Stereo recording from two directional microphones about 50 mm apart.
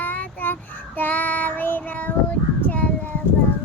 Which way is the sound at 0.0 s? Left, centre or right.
Left.